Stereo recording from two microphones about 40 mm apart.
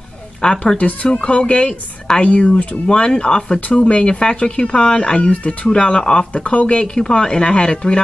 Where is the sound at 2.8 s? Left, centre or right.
Centre.